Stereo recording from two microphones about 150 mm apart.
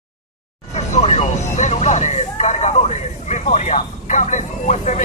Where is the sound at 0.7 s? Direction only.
45° left (ahead or behind).